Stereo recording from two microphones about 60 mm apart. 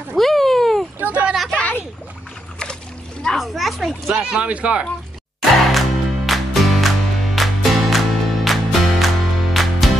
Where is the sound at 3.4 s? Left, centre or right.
Centre.